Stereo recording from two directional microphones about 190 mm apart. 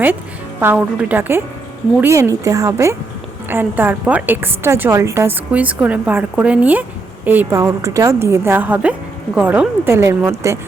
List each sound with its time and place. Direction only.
0.6 s a woman's voice: 10° right (ahead or behind)